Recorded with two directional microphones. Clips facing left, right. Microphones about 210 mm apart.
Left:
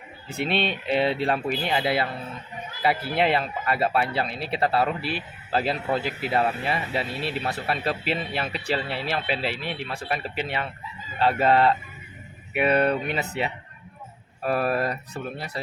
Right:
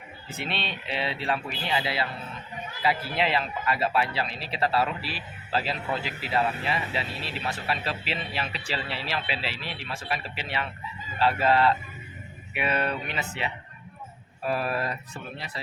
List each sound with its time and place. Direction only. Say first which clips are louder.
0.4 s speech: left 8 dB; 50° left (ahead or behind)
14.4 s speech: left 4 dB; 50° left (ahead or behind)